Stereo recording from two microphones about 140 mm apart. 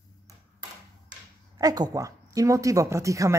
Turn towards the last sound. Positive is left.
turn(degrees=-25)  # may be behind; listen again after turning